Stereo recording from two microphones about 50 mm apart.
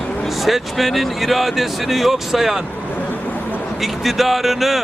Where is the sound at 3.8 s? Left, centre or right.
Centre.